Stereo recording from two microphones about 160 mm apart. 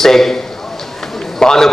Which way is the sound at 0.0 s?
Centre (ahead or behind).